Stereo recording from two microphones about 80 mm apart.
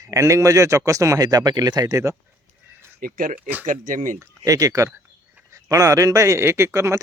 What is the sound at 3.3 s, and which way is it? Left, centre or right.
Speech, right.